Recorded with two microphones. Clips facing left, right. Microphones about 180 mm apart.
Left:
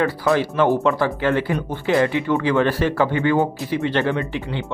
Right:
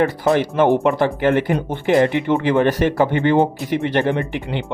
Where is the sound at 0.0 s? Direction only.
20° right (ahead or behind).